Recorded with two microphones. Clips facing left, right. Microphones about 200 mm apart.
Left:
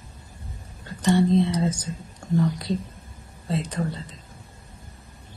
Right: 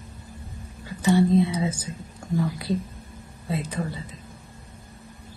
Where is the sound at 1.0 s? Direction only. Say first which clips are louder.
Even; 5° right (ahead or behind).